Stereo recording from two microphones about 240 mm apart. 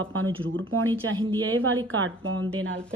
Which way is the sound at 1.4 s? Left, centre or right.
Right.